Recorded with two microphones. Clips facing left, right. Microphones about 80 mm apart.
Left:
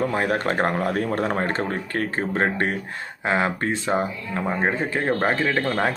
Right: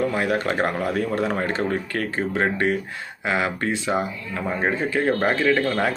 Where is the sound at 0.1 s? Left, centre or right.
Left.